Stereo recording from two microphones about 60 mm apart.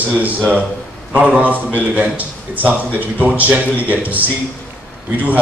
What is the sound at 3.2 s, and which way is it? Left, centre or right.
Speech, right.